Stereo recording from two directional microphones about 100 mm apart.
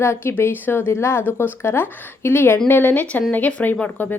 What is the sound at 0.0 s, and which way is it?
Speech, 25° left (ahead or behind).